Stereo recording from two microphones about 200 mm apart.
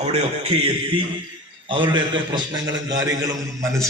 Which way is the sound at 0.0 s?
30° right (ahead or behind).